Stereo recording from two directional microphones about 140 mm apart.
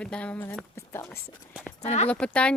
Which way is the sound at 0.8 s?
20° left (ahead or behind).